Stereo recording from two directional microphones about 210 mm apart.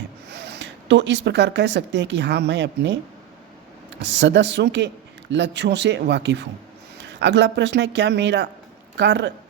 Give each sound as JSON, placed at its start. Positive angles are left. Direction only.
{"t": 0.3, "sound": "speech", "side_deg": -55}
{"t": 4.0, "sound": "speech", "side_deg": -55}